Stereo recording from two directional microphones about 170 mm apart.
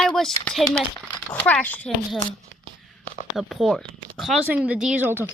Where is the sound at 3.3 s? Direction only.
Centre (ahead or behind).